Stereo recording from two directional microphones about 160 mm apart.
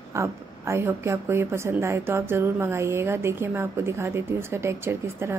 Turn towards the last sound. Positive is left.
turn(degrees=-15)  # may be behind; listen again after turning